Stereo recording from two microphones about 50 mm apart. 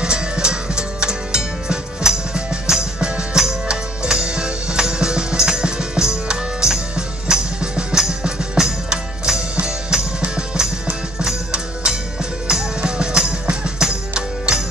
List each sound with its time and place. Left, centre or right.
0.0 s music: centre